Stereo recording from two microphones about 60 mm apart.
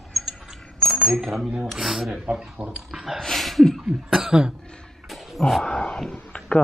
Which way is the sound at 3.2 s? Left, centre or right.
Centre.